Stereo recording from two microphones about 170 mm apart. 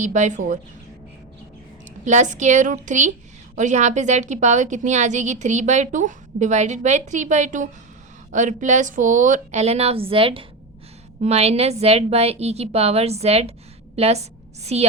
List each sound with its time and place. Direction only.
0.0 s a woman's voice: 45° right (ahead or behind)
2.0 s a woman's voice: 45° right (ahead or behind)